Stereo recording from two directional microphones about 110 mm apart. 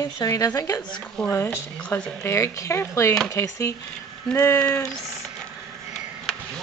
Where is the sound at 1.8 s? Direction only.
10° left (ahead or behind).